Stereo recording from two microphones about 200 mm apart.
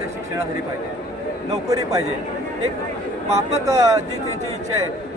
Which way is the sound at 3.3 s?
15° right (ahead or behind).